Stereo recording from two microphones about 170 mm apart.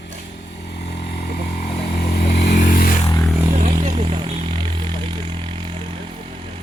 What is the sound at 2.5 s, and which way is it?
Vehicle, 55° left (ahead or behind).